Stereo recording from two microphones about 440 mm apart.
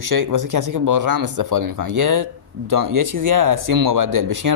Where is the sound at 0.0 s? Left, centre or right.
Right.